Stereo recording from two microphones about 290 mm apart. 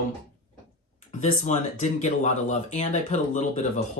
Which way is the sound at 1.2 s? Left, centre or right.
Left.